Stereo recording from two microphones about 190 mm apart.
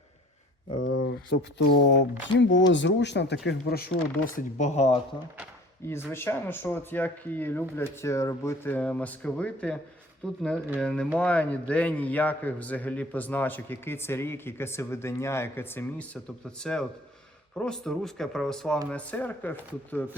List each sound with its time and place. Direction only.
0.9 s speech: 55° left (ahead or behind)
3.4 s speech: 55° left (ahead or behind)
4.4 s speech: 40° left (ahead or behind)
6.1 s a man's voice: 10° left (ahead or behind)